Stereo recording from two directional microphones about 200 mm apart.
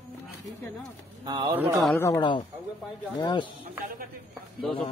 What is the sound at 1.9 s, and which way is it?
Speech, 20° left (ahead or behind).